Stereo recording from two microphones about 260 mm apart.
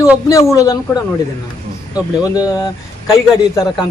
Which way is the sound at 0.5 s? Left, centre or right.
Centre.